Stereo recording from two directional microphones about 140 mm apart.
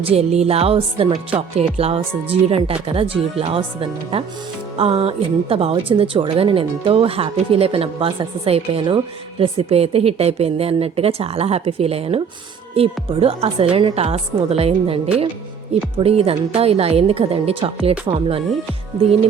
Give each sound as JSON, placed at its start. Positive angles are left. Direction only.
{"t": 0.0, "sound": "speech", "side_deg": -45}